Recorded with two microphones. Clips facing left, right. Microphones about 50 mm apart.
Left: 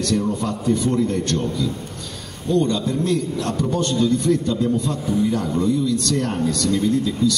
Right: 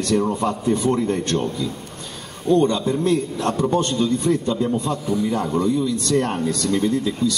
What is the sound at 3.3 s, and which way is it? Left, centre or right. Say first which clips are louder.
A man's voice: right 2 dB; right.